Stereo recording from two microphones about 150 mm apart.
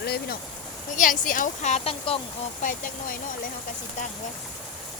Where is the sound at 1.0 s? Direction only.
60° left (ahead or behind); by 2.5 s 40° left (ahead or behind).